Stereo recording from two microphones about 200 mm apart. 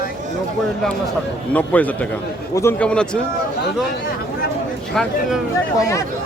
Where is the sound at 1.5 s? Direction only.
5° left (ahead or behind).